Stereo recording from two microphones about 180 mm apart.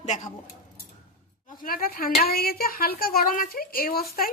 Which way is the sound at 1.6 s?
55° left (ahead or behind).